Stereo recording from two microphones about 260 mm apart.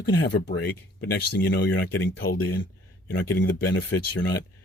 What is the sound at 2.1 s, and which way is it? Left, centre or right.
A man's voice, left.